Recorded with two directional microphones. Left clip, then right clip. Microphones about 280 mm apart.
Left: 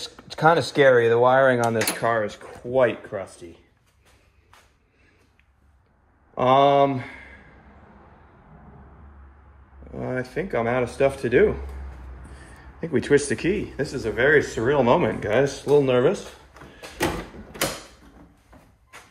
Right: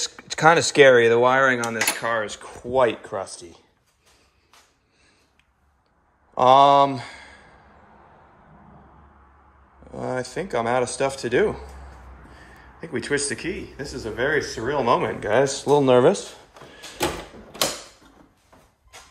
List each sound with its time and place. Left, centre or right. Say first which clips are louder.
0.1 s speech: right 2 dB; centre
6.3 s speech: right 3 dB; centre
9.8 s speech: right 1 dB; centre
12.8 s speech: left 5 dB; centre; by 16.3 s right